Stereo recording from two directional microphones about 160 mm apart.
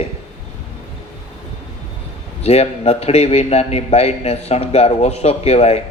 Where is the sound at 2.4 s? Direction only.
40° left (ahead or behind).